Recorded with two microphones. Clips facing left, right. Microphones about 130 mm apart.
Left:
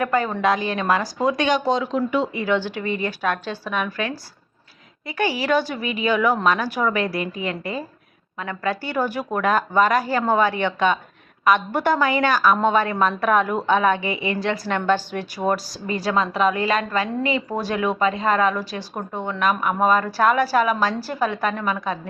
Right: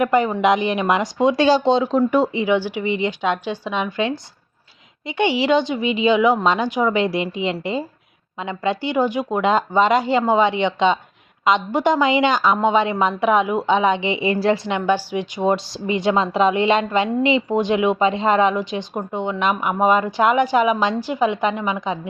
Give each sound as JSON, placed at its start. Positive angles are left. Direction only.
{"t": 0.0, "sound": "speech", "side_deg": -20}
{"t": 2.0, "sound": "speech", "side_deg": -45}
{"t": 2.3, "sound": "speech", "side_deg": -15}
{"t": 14.8, "sound": "speech", "side_deg": -10}